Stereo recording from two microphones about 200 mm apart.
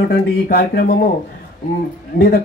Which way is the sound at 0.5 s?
50° left (ahead or behind).